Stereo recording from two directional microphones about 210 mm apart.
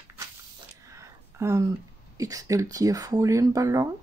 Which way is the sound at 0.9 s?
15° right (ahead or behind).